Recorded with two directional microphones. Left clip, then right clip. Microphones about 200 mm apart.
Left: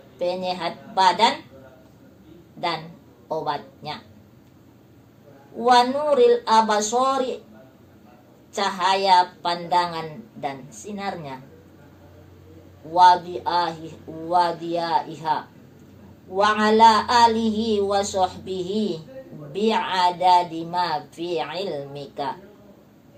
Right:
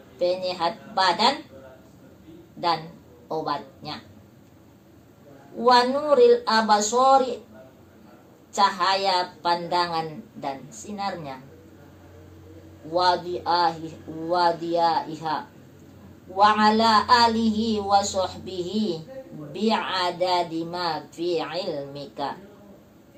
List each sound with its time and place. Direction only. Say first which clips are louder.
0.2 s speech: right 1 dB; centre (ahead or behind)
3.2 s a woman's voice: left 1 dB; centre (ahead or behind)
5.6 s speech: left 1 dB; centre (ahead or behind)
8.5 s speech: right 1 dB; centre (ahead or behind)
12.9 s speech: left 7 dB; centre (ahead or behind)
16.4 s speech: left 3 dB; centre (ahead or behind)